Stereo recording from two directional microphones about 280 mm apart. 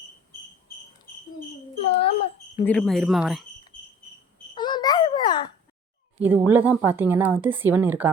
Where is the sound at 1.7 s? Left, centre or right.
Left.